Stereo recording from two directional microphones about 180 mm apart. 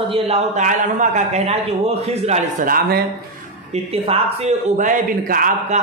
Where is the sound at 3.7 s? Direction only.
35° right (ahead or behind).